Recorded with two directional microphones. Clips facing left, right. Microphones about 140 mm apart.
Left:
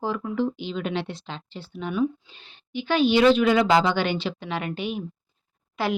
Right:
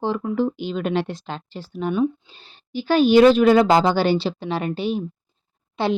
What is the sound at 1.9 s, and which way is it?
A woman's voice, 30° right (ahead or behind).